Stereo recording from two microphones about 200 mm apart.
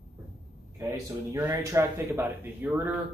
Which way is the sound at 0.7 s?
15° right (ahead or behind).